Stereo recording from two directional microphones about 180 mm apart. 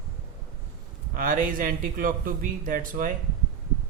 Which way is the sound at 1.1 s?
50° right (ahead or behind).